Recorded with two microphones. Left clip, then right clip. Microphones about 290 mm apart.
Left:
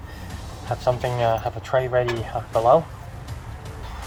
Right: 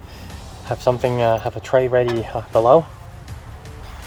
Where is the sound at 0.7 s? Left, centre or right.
Right.